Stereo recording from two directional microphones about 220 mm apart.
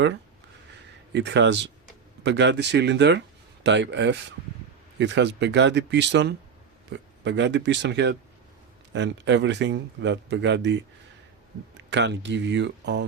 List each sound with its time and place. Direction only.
1.1 s speech: 55° right (ahead or behind)
11.8 s speech: 55° right (ahead or behind)